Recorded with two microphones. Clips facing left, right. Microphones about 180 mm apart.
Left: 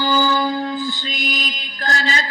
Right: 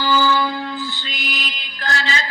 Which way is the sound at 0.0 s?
40° left (ahead or behind).